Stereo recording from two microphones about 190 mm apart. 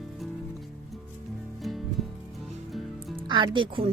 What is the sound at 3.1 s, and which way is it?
Speech, 25° right (ahead or behind).